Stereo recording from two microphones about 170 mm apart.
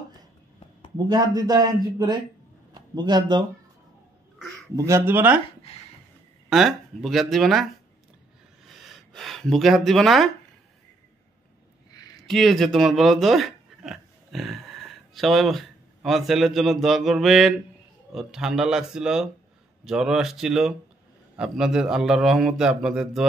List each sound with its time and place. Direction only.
0.9 s a man's voice: 25° right (ahead or behind)
4.7 s speech: 15° right (ahead or behind)
5.7 s a sound: 35° left (ahead or behind)
6.5 s a man's voice: centre (ahead or behind)
8.6 s speech: centre (ahead or behind)
11.9 s a sound: 25° left (ahead or behind)
12.3 s a man's voice: centre (ahead or behind)